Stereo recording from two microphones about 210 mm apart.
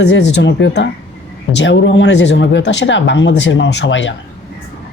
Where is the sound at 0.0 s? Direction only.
55° left (ahead or behind).